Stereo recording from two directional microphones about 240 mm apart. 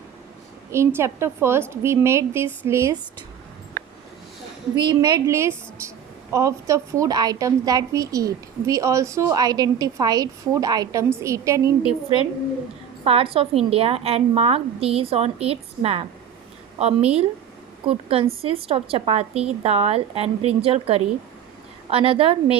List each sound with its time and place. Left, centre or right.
0.7 s a woman's voice: centre
4.8 s a woman's voice: centre
13.1 s a woman's voice: right